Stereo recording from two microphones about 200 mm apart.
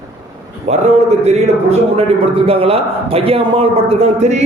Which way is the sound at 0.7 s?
35° right (ahead or behind).